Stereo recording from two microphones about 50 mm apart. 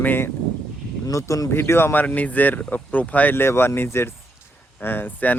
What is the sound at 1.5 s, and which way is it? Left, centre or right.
Speech, left.